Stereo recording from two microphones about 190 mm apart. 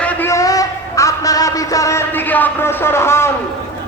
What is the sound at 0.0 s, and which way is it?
Music, 10° left (ahead or behind).